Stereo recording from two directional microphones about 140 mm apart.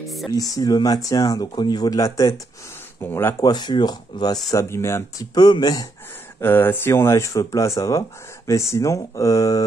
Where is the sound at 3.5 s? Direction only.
30° left (ahead or behind).